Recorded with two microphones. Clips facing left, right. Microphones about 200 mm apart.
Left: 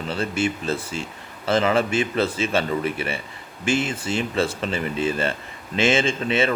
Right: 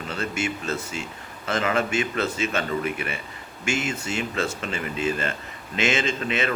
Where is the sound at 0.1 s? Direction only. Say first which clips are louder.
Left 4 dB; 30° left (ahead or behind).